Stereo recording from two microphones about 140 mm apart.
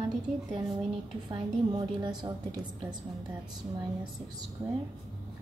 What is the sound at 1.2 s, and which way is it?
A woman's voice, 30° right (ahead or behind).